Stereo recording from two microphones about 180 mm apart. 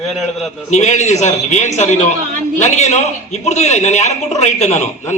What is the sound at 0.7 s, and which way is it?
A man's voice, 40° left (ahead or behind).